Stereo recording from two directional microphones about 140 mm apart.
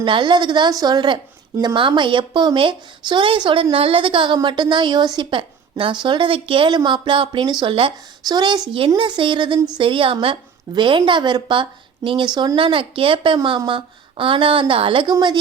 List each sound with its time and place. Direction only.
0.0 s a woman's voice: 35° right (ahead or behind)